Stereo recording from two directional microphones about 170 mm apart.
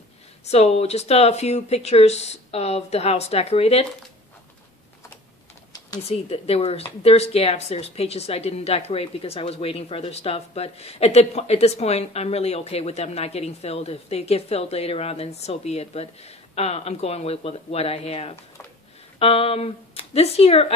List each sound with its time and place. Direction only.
0.5 s speech: 40° left (ahead or behind)
6.0 s speech: 35° left (ahead or behind)